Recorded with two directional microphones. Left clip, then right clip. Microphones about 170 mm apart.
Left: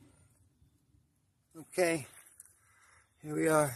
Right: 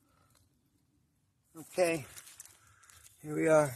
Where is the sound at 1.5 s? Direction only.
15° left (ahead or behind).